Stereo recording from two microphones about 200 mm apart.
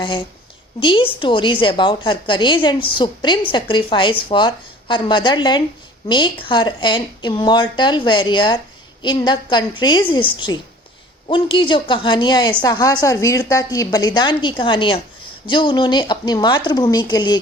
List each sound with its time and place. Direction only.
0.0 s a woman's voice: 25° left (ahead or behind)